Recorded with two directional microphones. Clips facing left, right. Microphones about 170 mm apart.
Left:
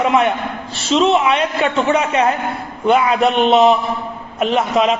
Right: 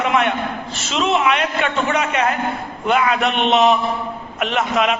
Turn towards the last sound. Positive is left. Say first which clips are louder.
# left 3 dB
turn(degrees=30)  # may be behind; listen again after turning